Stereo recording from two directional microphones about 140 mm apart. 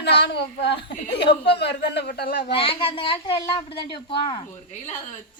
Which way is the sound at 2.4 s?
40° left (ahead or behind).